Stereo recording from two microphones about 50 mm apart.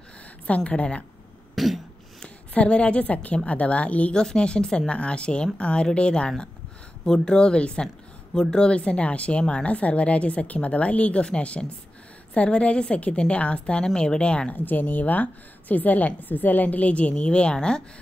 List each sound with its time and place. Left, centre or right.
0.7 s speech: left
1.5 s cough: centre
2.2 s a woman's voice: left
14.5 s a woman's voice: left; by 17.8 s centre